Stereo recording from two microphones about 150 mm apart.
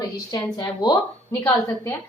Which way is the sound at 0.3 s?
25° left (ahead or behind).